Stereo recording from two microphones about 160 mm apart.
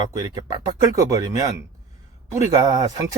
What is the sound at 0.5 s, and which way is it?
Speech, 20° right (ahead or behind).